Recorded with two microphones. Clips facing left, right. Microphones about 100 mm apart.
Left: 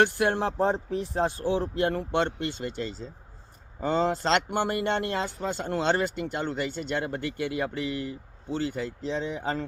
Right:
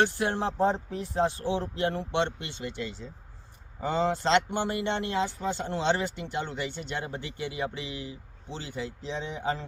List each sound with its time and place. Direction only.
0.0 s speech: 55° left (ahead or behind)